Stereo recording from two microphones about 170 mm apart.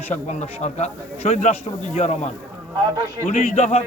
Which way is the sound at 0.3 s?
45° left (ahead or behind).